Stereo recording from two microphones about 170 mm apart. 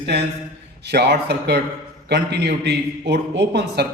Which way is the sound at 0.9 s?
75° right (ahead or behind).